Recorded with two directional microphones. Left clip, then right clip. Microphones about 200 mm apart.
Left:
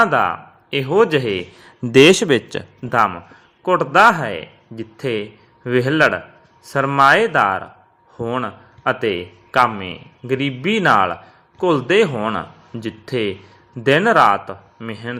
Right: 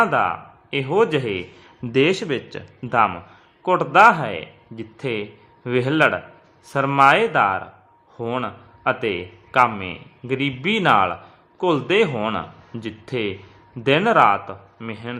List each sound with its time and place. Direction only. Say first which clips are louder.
0.0 s a man's voice: left 3 dB; 10° left (ahead or behind)
1.9 s speech: left 8 dB; 30° left (ahead or behind)
2.8 s a man's voice: left 2 dB; 5° left (ahead or behind)